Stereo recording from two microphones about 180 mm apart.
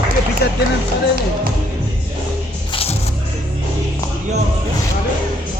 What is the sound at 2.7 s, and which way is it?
Music, 30° left (ahead or behind).